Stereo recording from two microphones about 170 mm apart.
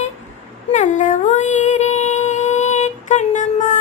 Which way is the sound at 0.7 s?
45° left (ahead or behind).